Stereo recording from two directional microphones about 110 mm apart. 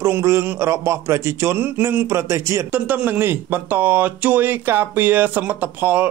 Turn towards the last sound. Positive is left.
turn(degrees=-15)  # may be behind; listen again after turning